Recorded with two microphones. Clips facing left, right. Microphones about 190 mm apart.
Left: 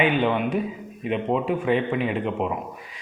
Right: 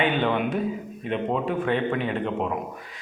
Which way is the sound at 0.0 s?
5° left (ahead or behind).